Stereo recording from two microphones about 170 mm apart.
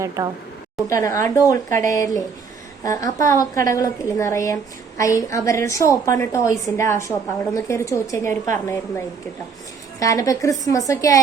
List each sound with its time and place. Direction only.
0.2 s a woman's voice: 20° right (ahead or behind)
0.9 s a woman's voice: 20° left (ahead or behind)
10.0 s a woman's voice: 20° left (ahead or behind)